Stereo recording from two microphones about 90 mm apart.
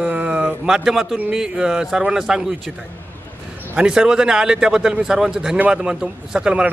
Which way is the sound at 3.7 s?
10° right (ahead or behind).